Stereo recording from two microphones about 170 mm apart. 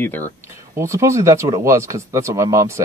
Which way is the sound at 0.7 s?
15° right (ahead or behind).